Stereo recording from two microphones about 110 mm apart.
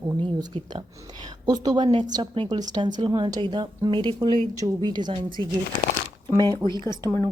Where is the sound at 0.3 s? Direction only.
40° right (ahead or behind).